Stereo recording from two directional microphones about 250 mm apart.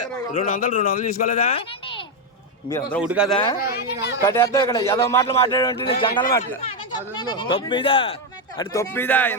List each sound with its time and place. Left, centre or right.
0.3 s speech: left
3.0 s a man's voice: centre
3.3 s speech: centre
3.6 s speech: left
4.2 s speech: centre